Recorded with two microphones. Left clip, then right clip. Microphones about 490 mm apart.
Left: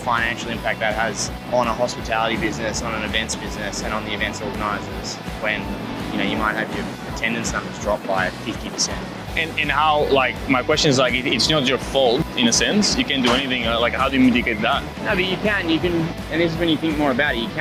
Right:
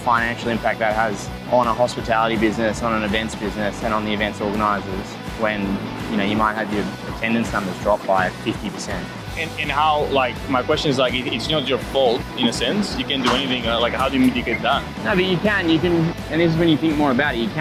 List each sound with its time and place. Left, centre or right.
0.1 s speech: right
6.1 s speech: right
7.9 s speech: right
9.4 s speech: left
15.0 s speech: right